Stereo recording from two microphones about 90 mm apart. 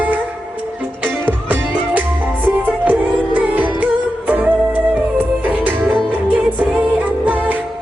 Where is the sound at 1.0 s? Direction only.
20° right (ahead or behind).